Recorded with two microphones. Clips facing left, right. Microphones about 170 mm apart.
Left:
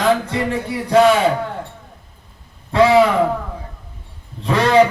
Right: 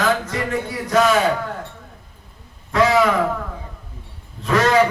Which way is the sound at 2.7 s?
30° left (ahead or behind).